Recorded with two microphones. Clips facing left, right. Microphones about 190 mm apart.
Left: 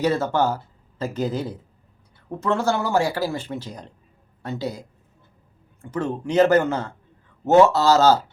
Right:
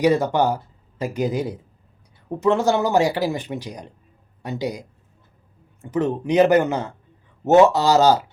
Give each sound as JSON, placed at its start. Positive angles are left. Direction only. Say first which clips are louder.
{"t": 0.0, "sound": "speech", "louder": "right 3 dB", "side_deg": -15}